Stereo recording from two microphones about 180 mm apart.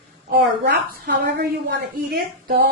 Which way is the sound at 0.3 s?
65° right (ahead or behind).